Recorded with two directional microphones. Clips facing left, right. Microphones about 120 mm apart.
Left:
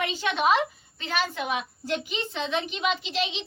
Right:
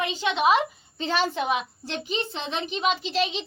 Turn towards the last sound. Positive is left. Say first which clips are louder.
# right 4 dB
turn(degrees=-40)  # may be behind; listen again after turning